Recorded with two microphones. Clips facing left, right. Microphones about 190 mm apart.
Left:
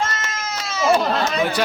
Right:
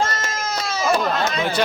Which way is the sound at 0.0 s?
35° right (ahead or behind).